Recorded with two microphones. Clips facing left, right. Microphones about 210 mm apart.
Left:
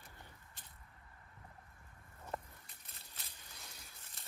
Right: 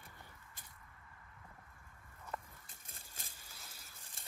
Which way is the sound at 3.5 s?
5° right (ahead or behind).